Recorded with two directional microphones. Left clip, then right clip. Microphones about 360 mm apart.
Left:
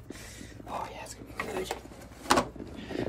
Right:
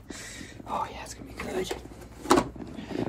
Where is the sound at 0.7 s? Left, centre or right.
Right.